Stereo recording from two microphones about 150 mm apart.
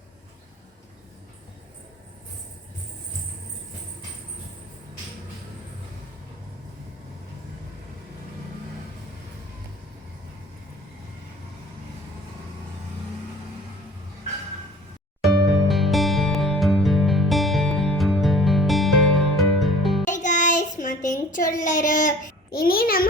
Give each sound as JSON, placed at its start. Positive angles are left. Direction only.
{"t": 15.2, "sound": "music", "side_deg": 0}
{"t": 20.1, "sound": "child singing", "side_deg": 55}
{"t": 22.5, "sound": "a child's voice", "side_deg": 80}